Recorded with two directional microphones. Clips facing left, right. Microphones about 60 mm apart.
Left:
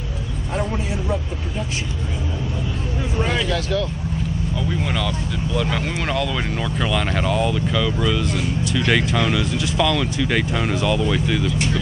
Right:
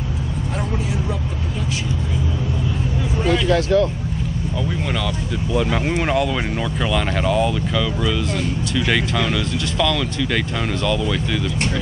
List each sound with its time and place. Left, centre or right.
3.4 s speech: right
4.6 s speech: centre
5.5 s speech: centre